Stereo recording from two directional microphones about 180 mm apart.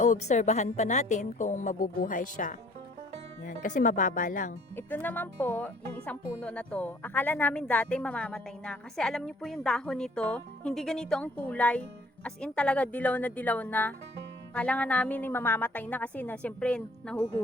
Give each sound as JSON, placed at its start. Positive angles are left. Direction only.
{"t": 0.0, "sound": "a woman's voice", "side_deg": 40}
{"t": 4.8, "sound": "speech", "side_deg": 10}